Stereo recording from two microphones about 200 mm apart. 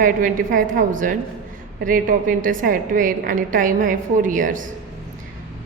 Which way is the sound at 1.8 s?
45° right (ahead or behind).